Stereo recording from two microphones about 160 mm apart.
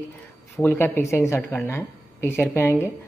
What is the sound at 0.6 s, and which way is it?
Speech, 15° left (ahead or behind).